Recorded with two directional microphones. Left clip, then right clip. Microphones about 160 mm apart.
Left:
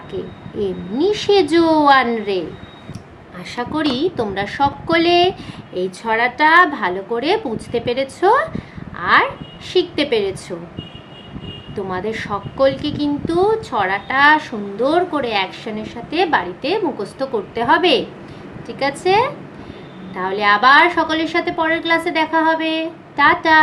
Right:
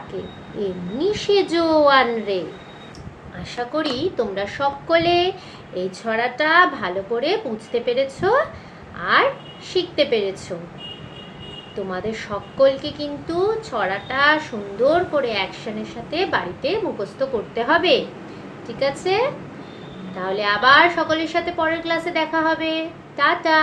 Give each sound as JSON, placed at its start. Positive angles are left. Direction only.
{"t": 0.6, "sound": "a woman's voice", "side_deg": 90}
{"t": 3.5, "sound": "a woman's voice", "side_deg": 90}
{"t": 11.9, "sound": "a woman's voice", "side_deg": 90}